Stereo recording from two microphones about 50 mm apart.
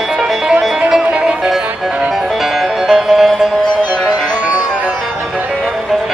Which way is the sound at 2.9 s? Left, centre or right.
Centre.